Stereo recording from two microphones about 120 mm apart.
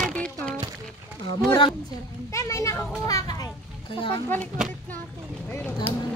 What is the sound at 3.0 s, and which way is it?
Children playing, 30° left (ahead or behind).